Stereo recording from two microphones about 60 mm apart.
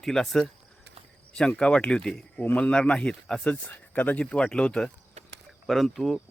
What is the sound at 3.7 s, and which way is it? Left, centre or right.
Speech, left.